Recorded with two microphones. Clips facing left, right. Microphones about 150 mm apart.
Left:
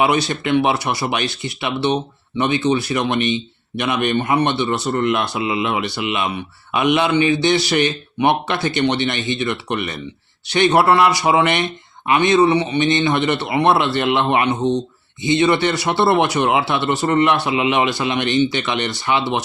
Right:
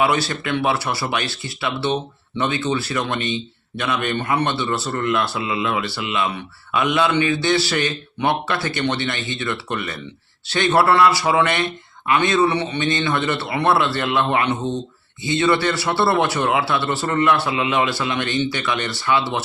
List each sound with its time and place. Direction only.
0.0 s a man's voice: 20° left (ahead or behind)